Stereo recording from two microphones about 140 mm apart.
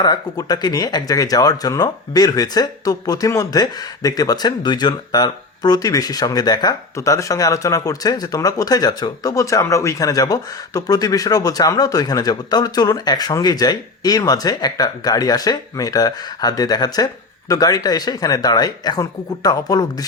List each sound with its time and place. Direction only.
0.0 s speech: 30° left (ahead or behind)